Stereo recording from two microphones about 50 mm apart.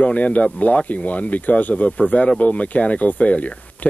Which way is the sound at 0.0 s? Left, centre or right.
Left.